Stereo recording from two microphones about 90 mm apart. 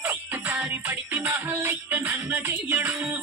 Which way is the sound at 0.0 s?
20° right (ahead or behind).